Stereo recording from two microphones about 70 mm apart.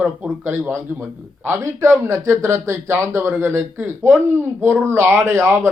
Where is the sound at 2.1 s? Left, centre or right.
Right.